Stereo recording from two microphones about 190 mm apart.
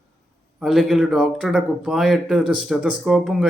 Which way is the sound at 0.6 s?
Centre (ahead or behind).